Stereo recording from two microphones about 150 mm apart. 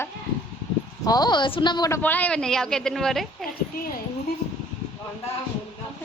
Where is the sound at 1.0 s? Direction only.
25° left (ahead or behind).